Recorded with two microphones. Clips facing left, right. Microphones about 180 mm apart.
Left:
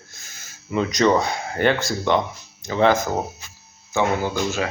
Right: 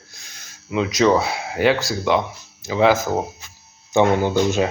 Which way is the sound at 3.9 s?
20° right (ahead or behind).